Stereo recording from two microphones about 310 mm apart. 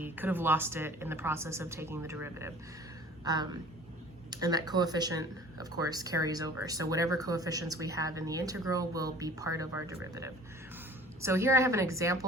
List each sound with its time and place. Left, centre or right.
0.0 s speech: centre
11.2 s speech: centre